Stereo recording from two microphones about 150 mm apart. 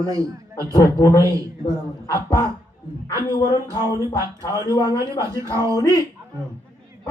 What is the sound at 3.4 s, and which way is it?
Speech, 25° left (ahead or behind).